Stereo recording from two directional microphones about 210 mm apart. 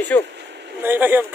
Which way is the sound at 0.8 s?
10° right (ahead or behind).